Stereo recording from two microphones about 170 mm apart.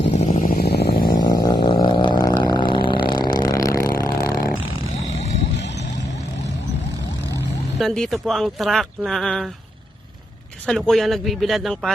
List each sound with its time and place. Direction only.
0.2 s vehicle: 40° left (ahead or behind)
0.4 s a sound: 60° left (ahead or behind)
1.2 s a sound: 25° left (ahead or behind)
3.9 s vehicle: 20° left (ahead or behind)
7.8 s speech: 5° left (ahead or behind)
10.7 s speech: 5° left (ahead or behind)